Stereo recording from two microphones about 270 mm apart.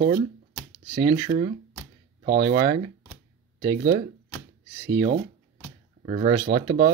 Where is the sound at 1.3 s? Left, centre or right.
Right.